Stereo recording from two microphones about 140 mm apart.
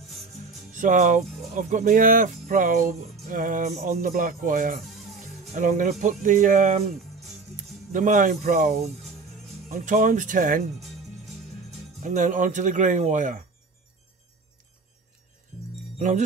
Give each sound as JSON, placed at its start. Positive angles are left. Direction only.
{"t": 0.1, "sound": "music", "side_deg": 0}
{"t": 0.7, "sound": "speech", "side_deg": -60}
{"t": 4.8, "sound": "music", "side_deg": 0}
{"t": 5.5, "sound": "speech", "side_deg": -60}
{"t": 7.9, "sound": "speech", "side_deg": -65}
{"t": 10.8, "sound": "music", "side_deg": 0}
{"t": 12.0, "sound": "speech", "side_deg": -65}